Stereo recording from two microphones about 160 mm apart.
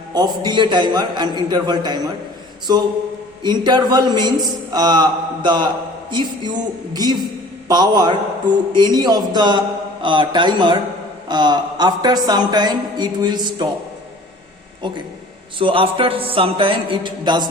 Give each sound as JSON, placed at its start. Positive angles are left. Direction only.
{"t": 0.1, "sound": "a man's voice", "side_deg": -25}
{"t": 3.4, "sound": "a man's voice", "side_deg": -25}
{"t": 14.8, "sound": "a man's voice", "side_deg": -30}
{"t": 15.5, "sound": "music", "side_deg": -35}